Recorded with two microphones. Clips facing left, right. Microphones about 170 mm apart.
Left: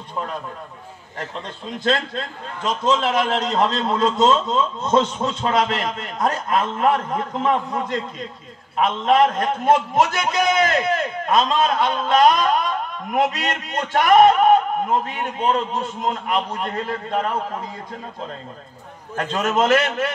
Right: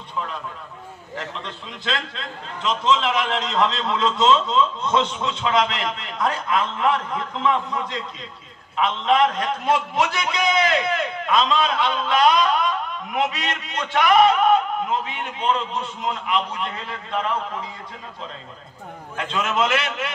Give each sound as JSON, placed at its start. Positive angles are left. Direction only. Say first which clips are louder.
{"t": 1.1, "sound": "a man's voice", "louder": "left 1 dB", "side_deg": 45}
{"t": 19.1, "sound": "a man's voice", "louder": "left 3 dB", "side_deg": 45}